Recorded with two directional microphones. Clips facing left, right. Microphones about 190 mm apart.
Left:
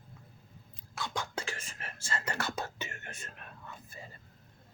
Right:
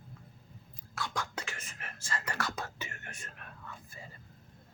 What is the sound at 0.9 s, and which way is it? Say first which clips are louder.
Whispering: left 1 dB; 20° left (ahead or behind).